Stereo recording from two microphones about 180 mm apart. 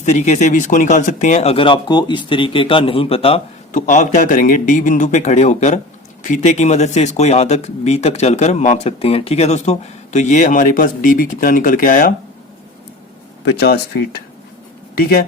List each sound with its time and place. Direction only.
0.0 s speech: 40° left (ahead or behind)
13.4 s speech: 65° left (ahead or behind)